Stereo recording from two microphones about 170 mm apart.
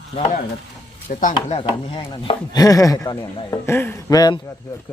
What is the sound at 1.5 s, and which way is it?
Speech, 35° left (ahead or behind).